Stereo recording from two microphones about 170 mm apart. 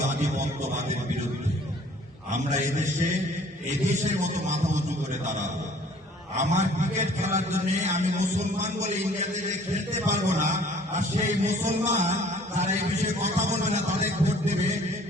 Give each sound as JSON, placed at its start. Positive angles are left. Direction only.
{"t": 0.0, "sound": "a sound", "side_deg": -45}
{"t": 2.3, "sound": "a man's voice", "side_deg": -45}
{"t": 6.3, "sound": "a man's voice", "side_deg": -45}